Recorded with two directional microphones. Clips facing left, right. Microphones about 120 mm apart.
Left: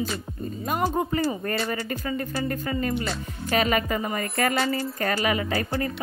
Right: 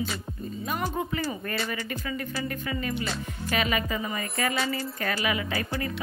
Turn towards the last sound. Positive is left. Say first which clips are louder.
# left 4 dB
turn(degrees=40)  # may be behind; listen again after turning